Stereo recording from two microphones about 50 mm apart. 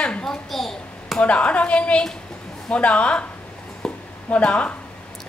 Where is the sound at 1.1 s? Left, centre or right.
Left.